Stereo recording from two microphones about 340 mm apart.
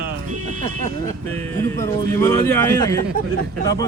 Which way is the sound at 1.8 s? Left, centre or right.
Centre.